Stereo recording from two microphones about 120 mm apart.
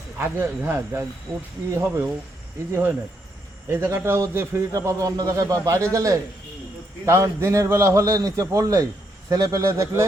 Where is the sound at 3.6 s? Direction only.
20° right (ahead or behind).